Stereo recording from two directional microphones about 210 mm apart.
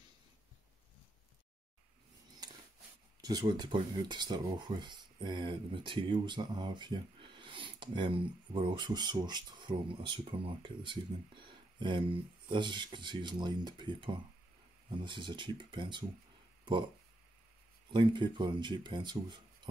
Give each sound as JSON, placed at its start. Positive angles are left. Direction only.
{"t": 3.2, "sound": "speech", "side_deg": -20}
{"t": 17.8, "sound": "speech", "side_deg": -20}